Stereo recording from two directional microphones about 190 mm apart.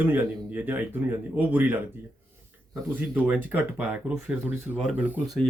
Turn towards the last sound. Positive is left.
turn(degrees=-5)  # may be behind; listen again after turning